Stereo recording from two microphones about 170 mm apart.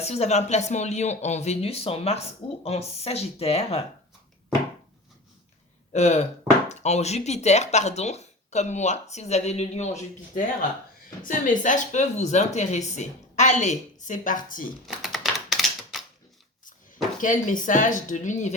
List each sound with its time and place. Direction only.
0.0 s speech: 40° left (ahead or behind)
5.9 s a woman's voice: 40° left (ahead or behind)
14.8 s typewriter: centre (ahead or behind)
17.2 s a woman's voice: 50° left (ahead or behind)